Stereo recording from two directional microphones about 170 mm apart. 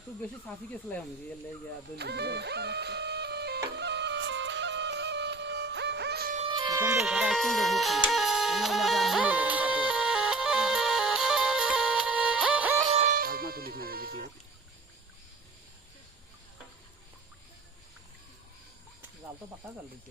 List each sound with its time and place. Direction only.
2.0 s music: 75° right (ahead or behind)
6.3 s music: 35° right (ahead or behind); by 7.0 s 15° right (ahead or behind)
7.0 s music: 5° right (ahead or behind)
12.9 s music: 40° right (ahead or behind)
13.1 s music: 60° right (ahead or behind)